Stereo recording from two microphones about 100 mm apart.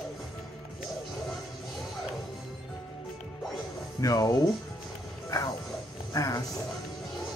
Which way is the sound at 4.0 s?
40° left (ahead or behind).